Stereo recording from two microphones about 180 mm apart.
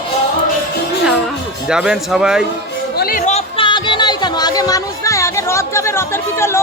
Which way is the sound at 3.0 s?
50° left (ahead or behind).